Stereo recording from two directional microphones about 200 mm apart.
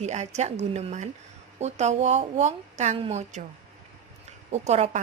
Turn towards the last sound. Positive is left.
turn(degrees=-35)  # may be behind; listen again after turning